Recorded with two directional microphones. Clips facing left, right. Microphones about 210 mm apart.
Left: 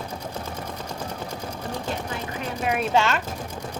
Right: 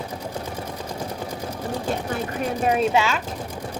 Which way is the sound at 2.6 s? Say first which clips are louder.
Right 4 dB; 35° right (ahead or behind).